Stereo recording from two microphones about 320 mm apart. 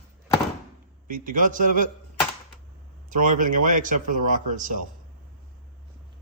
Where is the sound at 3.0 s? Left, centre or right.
Right.